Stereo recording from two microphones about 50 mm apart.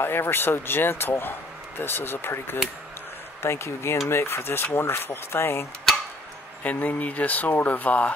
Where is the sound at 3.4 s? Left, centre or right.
Left.